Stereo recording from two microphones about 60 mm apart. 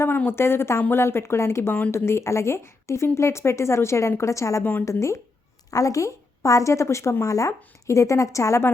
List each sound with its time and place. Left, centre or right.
0.3 s a woman's voice: left
5.7 s a woman's voice: left
7.3 s a woman's voice: left